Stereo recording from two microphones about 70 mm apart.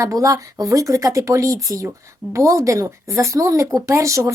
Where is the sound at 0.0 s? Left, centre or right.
Right.